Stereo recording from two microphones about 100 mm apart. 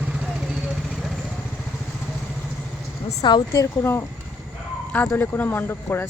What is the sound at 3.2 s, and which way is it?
Speech, 50° left (ahead or behind).